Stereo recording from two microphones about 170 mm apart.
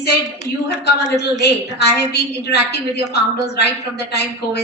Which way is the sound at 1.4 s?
75° left (ahead or behind).